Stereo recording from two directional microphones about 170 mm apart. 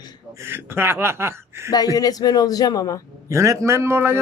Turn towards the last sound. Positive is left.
turn(degrees=-15)  # may be behind; listen again after turning